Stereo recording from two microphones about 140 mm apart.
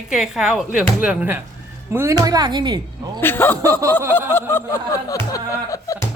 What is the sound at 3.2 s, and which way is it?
Speech, 15° left (ahead or behind).